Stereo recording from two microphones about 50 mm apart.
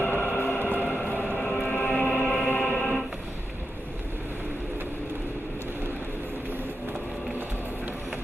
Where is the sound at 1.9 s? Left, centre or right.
Left.